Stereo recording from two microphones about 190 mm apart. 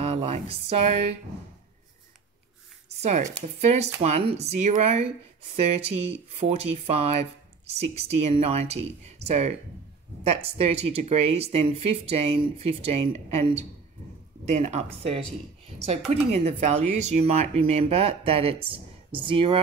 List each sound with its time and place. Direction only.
0.0 s speech: 35° right (ahead or behind)
3.0 s speech: 40° right (ahead or behind)
16.3 s speech: 35° right (ahead or behind)